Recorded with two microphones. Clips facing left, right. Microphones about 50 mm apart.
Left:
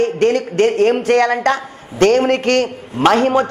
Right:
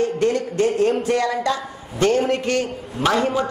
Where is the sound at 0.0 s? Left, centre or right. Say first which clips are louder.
Left 5 dB; left.